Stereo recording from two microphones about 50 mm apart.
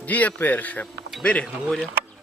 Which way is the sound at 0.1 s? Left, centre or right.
Left.